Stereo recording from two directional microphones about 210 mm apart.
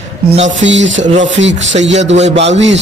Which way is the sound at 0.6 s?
60° right (ahead or behind).